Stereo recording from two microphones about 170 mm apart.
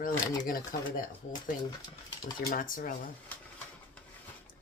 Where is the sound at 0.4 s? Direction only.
55° left (ahead or behind).